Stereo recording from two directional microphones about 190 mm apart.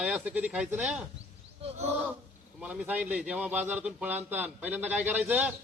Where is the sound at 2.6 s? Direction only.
5° right (ahead or behind).